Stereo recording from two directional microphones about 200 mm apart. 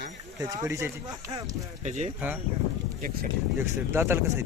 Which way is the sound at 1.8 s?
35° right (ahead or behind).